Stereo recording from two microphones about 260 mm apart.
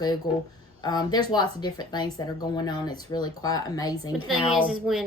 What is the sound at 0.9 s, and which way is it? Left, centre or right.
Speech, centre.